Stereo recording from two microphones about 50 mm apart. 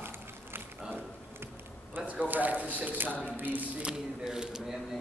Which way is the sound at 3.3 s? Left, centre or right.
Right.